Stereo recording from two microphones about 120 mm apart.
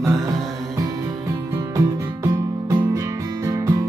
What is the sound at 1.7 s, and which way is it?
Music, 30° right (ahead or behind).